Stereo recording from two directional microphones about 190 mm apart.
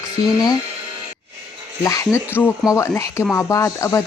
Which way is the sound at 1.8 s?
15° left (ahead or behind).